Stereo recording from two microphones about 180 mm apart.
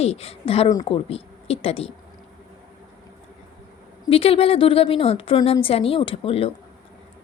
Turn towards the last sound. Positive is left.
turn(degrees=35)  # may be behind; listen again after turning